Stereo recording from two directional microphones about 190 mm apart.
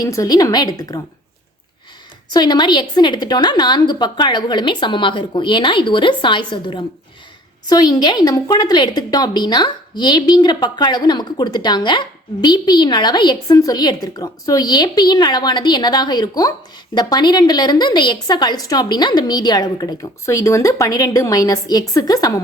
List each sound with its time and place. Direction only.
0.0 s a woman's voice: 20° left (ahead or behind)
2.3 s a woman's voice: 20° left (ahead or behind)